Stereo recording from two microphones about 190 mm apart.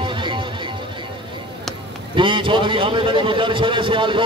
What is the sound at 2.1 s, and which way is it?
A man's voice, 25° right (ahead or behind).